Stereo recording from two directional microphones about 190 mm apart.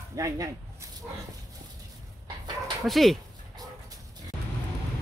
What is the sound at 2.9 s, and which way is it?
Speech, centre (ahead or behind).